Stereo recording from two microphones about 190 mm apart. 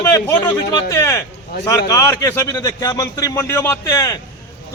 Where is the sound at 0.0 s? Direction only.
15° left (ahead or behind).